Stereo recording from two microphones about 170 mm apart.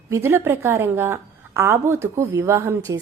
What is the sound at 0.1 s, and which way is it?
A woman's voice, 15° right (ahead or behind).